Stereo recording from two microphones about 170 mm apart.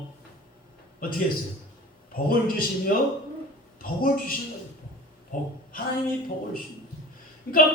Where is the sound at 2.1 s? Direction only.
55° left (ahead or behind).